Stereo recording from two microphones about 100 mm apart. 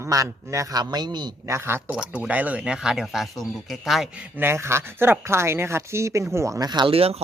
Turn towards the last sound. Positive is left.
turn(degrees=-80)